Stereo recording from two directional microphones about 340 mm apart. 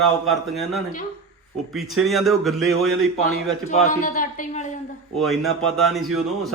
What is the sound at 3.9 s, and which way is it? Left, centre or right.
Speech, left.